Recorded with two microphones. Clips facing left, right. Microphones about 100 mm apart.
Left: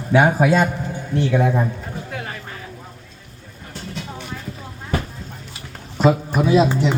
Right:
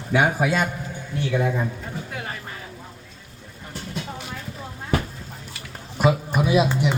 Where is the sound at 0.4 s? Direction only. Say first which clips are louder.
Left 6 dB; 30° left (ahead or behind).